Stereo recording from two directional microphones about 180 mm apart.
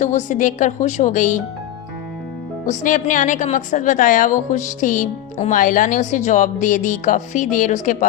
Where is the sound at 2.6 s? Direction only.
45° left (ahead or behind).